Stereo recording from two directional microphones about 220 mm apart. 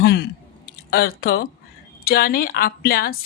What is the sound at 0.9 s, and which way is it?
Speech, 45° left (ahead or behind).